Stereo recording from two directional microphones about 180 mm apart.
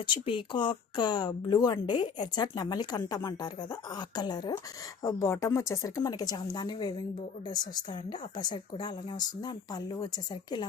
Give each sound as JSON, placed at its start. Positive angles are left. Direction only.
{"t": 0.0, "sound": "a woman's voice", "side_deg": 30}